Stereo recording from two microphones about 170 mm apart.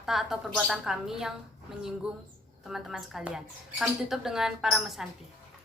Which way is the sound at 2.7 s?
Centre (ahead or behind).